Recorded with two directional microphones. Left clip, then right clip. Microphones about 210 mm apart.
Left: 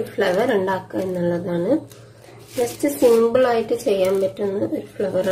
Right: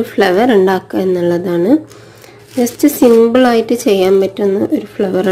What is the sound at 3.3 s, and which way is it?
A woman's voice, 45° right (ahead or behind).